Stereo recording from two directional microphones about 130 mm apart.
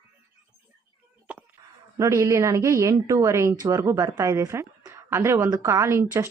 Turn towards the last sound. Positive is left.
turn(degrees=-20)  # may be behind; listen again after turning